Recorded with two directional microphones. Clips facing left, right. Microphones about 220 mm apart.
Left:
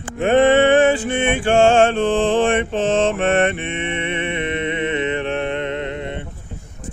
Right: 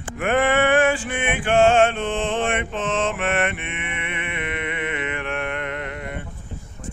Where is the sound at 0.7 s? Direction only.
20° left (ahead or behind).